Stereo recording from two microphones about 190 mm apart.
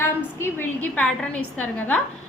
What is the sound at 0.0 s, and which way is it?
A woman's voice, 10° left (ahead or behind).